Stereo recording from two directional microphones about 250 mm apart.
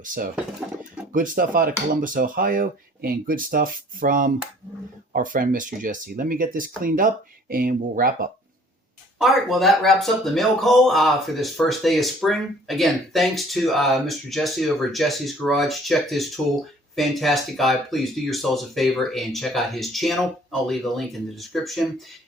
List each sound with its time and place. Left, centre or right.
0.0 s speech: right
9.1 s speech: centre